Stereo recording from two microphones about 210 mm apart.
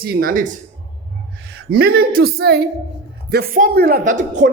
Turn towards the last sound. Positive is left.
turn(degrees=-35)  # may be behind; listen again after turning